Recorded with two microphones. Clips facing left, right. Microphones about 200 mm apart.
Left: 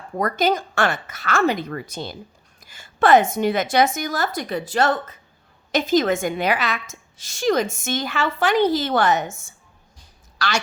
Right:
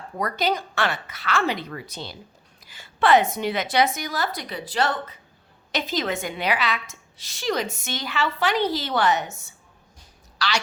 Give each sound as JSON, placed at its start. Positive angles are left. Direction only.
{"t": 0.2, "sound": "a woman's voice", "side_deg": 50}